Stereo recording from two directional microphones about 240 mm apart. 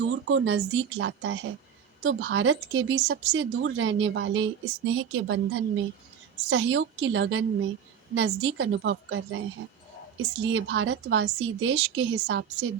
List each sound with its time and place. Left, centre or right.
0.0 s speech: right